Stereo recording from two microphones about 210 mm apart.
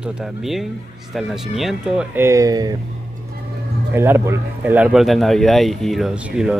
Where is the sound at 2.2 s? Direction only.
15° right (ahead or behind).